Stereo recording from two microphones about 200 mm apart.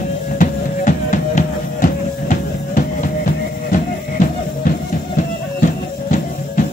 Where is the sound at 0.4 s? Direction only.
40° left (ahead or behind).